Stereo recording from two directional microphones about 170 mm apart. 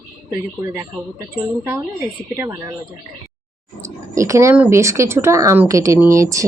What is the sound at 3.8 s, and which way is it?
Speech, 20° right (ahead or behind).